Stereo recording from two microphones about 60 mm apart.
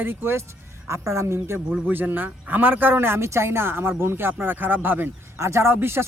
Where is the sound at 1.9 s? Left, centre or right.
Right.